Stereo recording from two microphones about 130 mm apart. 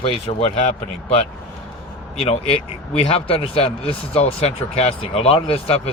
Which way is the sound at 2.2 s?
45° left (ahead or behind).